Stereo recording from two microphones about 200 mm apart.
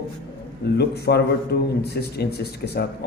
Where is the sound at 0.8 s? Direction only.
55° left (ahead or behind).